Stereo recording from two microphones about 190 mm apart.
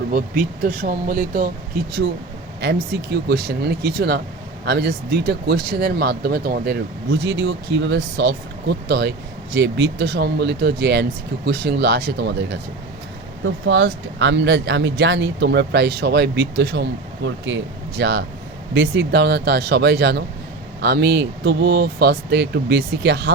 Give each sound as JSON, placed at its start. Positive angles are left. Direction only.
{"t": 0.1, "sound": "speech", "side_deg": -50}
{"t": 13.4, "sound": "speech", "side_deg": -85}